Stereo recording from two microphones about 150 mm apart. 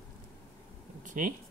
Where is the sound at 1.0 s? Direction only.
60° right (ahead or behind).